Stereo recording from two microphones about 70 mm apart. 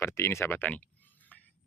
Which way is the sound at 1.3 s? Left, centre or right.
Centre.